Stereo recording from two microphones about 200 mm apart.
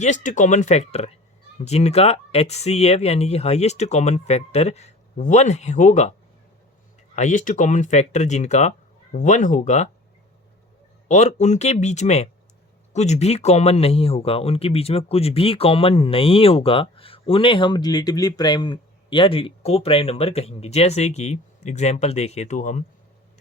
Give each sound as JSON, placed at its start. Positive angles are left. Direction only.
{"t": 0.0, "sound": "speech", "side_deg": 40}
{"t": 7.2, "sound": "speech", "side_deg": 40}
{"t": 11.1, "sound": "speech", "side_deg": 35}